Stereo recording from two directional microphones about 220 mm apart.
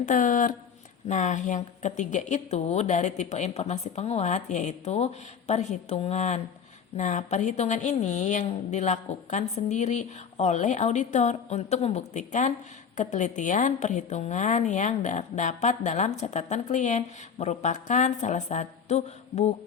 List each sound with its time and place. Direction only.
0.0 s a woman's voice: 35° left (ahead or behind)